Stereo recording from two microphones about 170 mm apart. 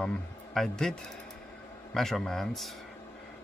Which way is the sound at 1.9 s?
Centre (ahead or behind).